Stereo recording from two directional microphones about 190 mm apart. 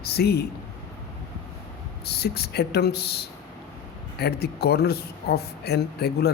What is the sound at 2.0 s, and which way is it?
Speech, 55° left (ahead or behind).